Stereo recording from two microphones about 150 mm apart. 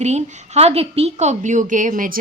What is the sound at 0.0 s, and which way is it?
A woman's voice, 50° right (ahead or behind).